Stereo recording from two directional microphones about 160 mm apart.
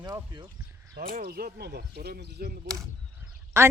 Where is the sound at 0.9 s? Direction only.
85° right.